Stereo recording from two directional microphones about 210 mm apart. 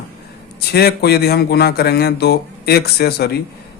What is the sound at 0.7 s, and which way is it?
Speech, 50° left (ahead or behind).